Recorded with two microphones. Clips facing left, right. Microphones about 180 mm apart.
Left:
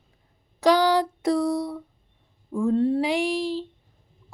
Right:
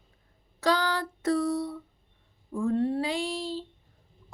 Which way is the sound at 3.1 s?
90° left.